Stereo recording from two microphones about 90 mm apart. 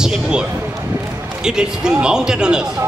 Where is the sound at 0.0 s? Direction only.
5° right (ahead or behind).